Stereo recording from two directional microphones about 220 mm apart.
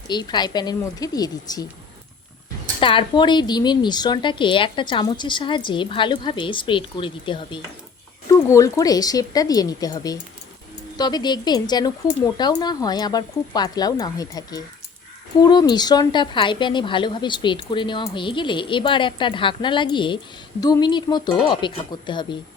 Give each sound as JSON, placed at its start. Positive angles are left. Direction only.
{"t": 0.1, "sound": "a woman's voice", "side_deg": 20}
{"t": 2.8, "sound": "a woman's voice", "side_deg": 20}